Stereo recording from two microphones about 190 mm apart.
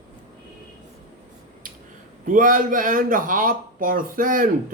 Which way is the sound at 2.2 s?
45° right (ahead or behind).